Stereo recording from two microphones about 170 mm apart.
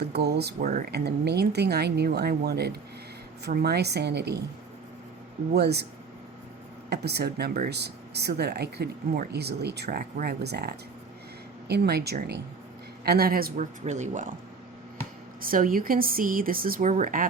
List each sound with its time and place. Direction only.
0.1 s speech: 75° right (ahead or behind)
0.6 s speech: 50° right (ahead or behind)
0.9 s speech: 75° right (ahead or behind)
5.5 s speech: 75° right (ahead or behind)
6.9 s speech: 75° right (ahead or behind)
13.8 s speech: 45° right (ahead or behind)
15.4 s speech: 55° right (ahead or behind)